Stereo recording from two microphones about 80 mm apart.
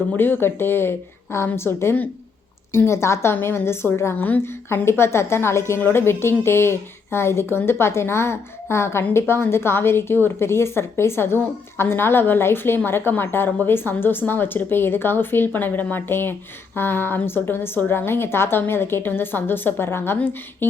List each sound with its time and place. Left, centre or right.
0.2 s a woman's voice: left